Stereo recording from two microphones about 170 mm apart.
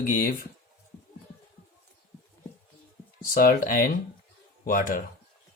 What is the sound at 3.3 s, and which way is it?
Speech, 55° left (ahead or behind).